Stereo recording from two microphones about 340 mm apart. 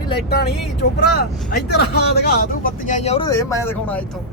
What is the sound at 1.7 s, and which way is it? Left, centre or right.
Speech, left.